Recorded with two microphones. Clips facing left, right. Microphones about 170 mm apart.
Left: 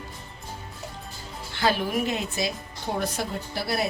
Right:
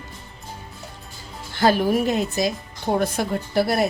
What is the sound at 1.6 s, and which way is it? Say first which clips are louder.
Speech: right 6 dB; 45° right (ahead or behind).